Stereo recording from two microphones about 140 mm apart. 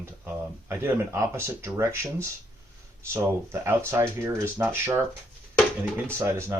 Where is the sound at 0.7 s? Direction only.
15° right (ahead or behind).